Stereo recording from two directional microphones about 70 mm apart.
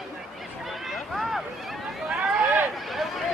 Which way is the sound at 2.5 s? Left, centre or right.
Right.